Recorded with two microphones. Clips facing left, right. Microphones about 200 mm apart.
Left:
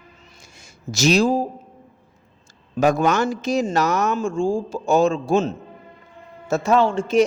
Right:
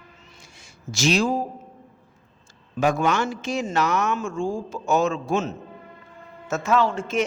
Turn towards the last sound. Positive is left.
turn(degrees=30)  # may be behind; listen again after turning